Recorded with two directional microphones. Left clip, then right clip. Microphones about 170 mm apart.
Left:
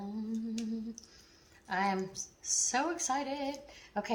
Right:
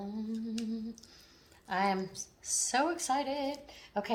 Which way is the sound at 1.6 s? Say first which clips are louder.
Right 1 dB; 30° right (ahead or behind).